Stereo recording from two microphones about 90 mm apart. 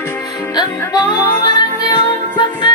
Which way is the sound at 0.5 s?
50° left (ahead or behind).